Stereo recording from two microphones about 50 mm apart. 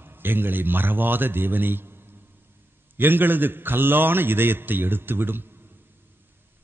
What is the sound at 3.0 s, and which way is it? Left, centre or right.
A man's voice, right.